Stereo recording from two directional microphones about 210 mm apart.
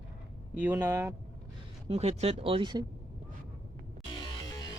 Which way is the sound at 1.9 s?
30° right (ahead or behind).